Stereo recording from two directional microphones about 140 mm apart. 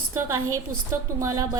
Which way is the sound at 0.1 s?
25° right (ahead or behind).